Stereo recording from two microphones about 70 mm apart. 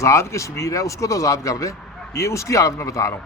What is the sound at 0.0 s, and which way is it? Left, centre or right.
Speech, left.